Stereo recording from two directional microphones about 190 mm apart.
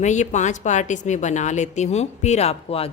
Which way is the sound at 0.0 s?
40° left (ahead or behind).